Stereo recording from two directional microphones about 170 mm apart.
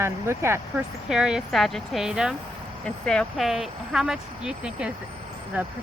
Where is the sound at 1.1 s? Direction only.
5° right (ahead or behind).